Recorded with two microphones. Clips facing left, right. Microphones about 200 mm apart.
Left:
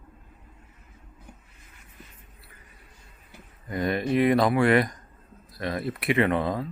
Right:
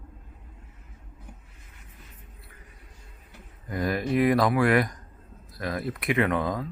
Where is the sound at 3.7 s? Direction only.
Centre (ahead or behind).